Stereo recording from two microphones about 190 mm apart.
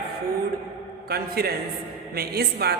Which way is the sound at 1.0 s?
55° right (ahead or behind).